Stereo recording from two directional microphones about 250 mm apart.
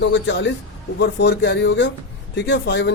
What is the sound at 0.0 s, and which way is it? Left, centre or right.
A man's voice, left.